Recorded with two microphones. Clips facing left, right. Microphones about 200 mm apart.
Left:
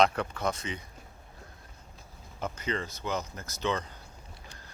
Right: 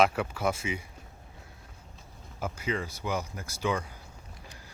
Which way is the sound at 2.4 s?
10° right (ahead or behind).